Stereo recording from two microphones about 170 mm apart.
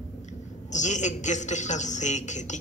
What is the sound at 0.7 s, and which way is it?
A man's voice, 45° left (ahead or behind).